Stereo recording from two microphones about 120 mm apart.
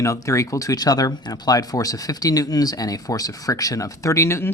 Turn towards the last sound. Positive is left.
turn(degrees=20)  # may be behind; listen again after turning